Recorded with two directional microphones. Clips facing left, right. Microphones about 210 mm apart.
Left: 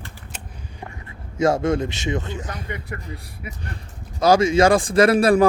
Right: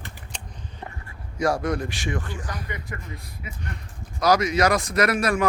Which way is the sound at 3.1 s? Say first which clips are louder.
Left 3 dB; 30° left (ahead or behind).